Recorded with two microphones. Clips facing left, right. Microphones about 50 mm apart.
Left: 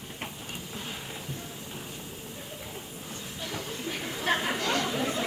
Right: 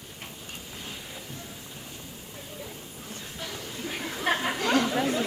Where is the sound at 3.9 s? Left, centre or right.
Centre.